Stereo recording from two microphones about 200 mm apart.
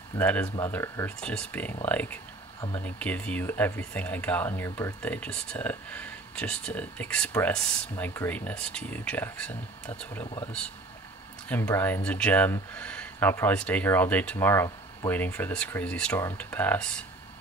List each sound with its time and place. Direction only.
0.2 s speech: 10° left (ahead or behind)
10.2 s speech: 25° left (ahead or behind)
11.4 s speech: 10° left (ahead or behind)